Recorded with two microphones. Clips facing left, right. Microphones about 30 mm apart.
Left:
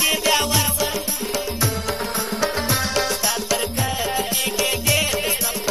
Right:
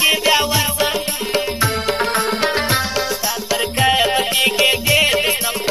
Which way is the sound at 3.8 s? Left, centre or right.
Right.